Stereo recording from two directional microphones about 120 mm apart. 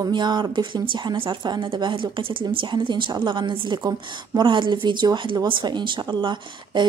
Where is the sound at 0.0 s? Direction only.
40° right (ahead or behind).